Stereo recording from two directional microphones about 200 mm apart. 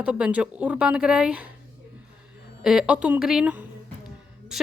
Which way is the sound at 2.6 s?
5° right (ahead or behind).